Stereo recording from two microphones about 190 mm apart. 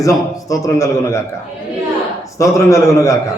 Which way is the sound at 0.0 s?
20° left (ahead or behind).